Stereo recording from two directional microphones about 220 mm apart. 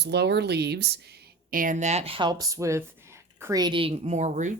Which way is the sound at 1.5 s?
40° right (ahead or behind).